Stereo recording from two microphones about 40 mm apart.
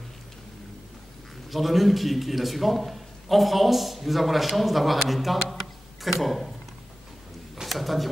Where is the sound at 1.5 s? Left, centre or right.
Centre.